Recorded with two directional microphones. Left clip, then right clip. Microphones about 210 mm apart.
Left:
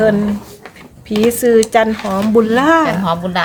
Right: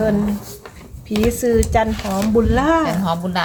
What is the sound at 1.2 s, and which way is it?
Speech, 20° left (ahead or behind).